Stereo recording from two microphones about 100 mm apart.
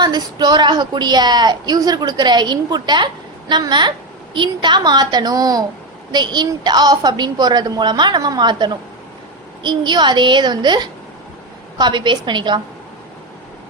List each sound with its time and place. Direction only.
0.0 s a woman's voice: 45° right (ahead or behind)